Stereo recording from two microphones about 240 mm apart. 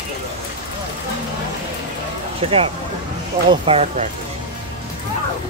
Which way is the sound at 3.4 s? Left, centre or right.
Right.